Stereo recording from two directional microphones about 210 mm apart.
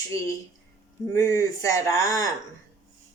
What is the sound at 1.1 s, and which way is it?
Speech, 15° left (ahead or behind).